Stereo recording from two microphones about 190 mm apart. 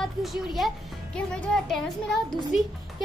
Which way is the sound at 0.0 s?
Centre (ahead or behind).